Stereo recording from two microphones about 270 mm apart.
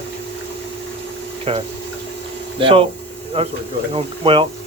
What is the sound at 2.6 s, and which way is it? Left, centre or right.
Speech, centre.